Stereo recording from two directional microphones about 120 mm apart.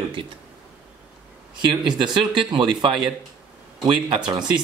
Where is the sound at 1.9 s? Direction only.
40° right (ahead or behind).